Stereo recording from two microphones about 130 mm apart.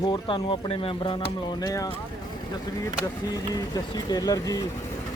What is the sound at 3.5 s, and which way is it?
Speech, 30° left (ahead or behind).